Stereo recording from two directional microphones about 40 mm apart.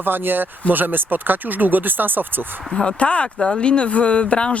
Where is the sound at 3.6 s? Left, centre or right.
Left.